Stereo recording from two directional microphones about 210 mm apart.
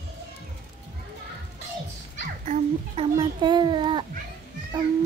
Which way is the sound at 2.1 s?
35° right (ahead or behind).